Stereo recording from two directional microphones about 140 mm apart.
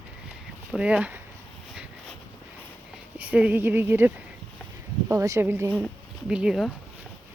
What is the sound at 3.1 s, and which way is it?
Speech, 10° right (ahead or behind).